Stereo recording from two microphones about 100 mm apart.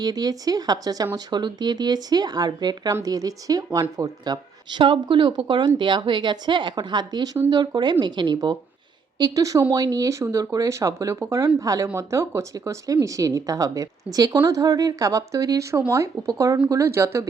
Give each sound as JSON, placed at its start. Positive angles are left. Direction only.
{"t": 0.0, "sound": "a woman's voice", "side_deg": -40}
{"t": 4.8, "sound": "a woman's voice", "side_deg": -60}